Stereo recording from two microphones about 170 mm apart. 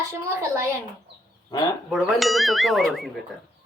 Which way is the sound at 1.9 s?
Centre (ahead or behind).